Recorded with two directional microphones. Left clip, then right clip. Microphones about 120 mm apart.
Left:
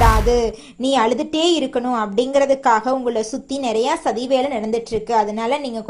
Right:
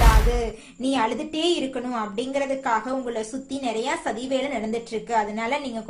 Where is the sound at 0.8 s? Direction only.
65° left (ahead or behind).